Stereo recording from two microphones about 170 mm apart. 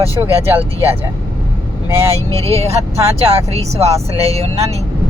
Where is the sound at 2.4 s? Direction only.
35° right (ahead or behind).